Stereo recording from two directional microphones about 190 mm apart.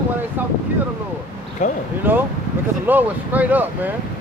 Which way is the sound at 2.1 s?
10° right (ahead or behind).